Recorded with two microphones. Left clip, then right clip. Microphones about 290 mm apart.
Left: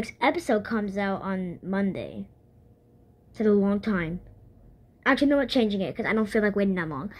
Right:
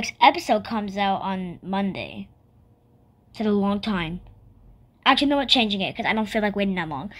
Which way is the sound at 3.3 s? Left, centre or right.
Centre.